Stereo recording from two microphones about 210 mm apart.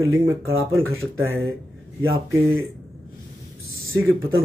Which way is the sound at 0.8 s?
75° right (ahead or behind).